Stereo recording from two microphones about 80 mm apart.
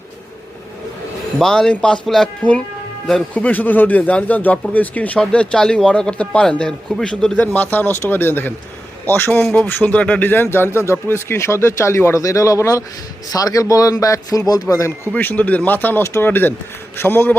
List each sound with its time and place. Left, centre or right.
1.4 s a man's voice: centre
3.3 s a man's voice: left
14.7 s speech: left
15.1 s speech: left